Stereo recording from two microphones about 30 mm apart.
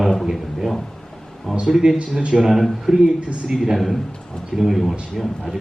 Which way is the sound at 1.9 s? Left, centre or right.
Right.